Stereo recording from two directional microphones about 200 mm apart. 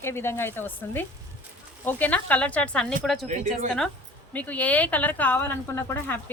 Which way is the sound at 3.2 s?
35° right (ahead or behind).